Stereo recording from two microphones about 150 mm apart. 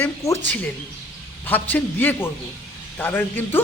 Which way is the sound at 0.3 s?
10° left (ahead or behind).